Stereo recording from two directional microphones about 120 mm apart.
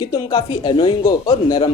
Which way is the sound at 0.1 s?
35° left (ahead or behind).